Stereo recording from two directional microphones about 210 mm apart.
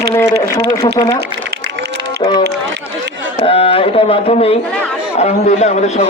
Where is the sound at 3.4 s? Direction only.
25° left (ahead or behind).